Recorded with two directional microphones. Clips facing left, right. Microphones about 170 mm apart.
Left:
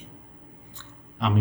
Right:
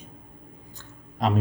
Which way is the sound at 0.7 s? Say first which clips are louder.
Right 1 dB; 40° right (ahead or behind).